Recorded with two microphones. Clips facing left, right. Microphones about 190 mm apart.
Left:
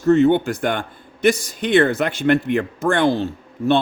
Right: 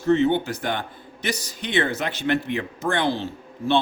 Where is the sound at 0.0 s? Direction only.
45° left (ahead or behind).